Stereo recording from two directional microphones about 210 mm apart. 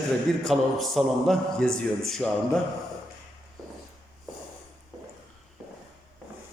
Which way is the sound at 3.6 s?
15° right (ahead or behind).